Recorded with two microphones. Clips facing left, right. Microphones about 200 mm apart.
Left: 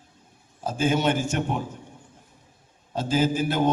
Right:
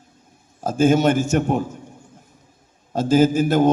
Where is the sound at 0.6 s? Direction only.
45° right (ahead or behind).